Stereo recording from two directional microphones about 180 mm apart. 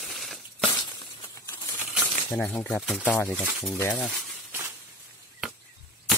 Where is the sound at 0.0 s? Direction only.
Centre (ahead or behind).